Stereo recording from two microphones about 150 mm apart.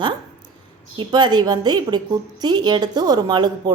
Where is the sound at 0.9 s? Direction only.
30° right (ahead or behind).